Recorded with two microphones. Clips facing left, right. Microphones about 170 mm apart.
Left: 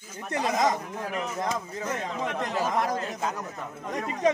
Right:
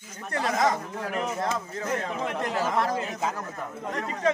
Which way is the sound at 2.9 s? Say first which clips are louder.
Right 1 dB; centre (ahead or behind).